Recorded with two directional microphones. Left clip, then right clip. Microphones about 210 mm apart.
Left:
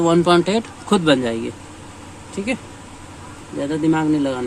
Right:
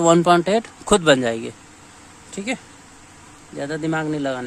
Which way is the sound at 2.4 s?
50° right (ahead or behind).